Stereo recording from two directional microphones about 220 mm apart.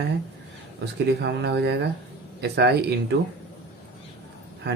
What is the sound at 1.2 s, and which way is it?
Speech, 50° right (ahead or behind).